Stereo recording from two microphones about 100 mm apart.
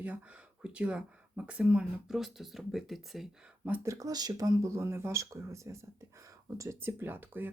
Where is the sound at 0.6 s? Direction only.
10° right (ahead or behind).